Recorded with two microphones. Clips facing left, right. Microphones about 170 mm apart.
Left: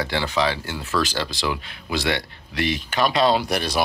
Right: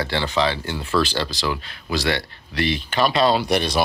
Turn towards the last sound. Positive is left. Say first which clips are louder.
# right 4 dB
turn(degrees=5)  # may be behind; listen again after turning